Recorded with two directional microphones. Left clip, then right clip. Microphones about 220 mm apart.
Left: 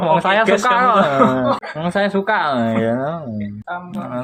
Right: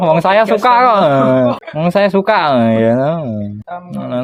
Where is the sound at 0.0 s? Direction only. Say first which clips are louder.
Right 4 dB; 35° right (ahead or behind).